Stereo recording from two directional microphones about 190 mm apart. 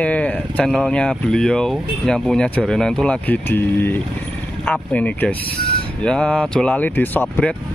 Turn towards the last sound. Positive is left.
turn(degrees=10)  # may be behind; listen again after turning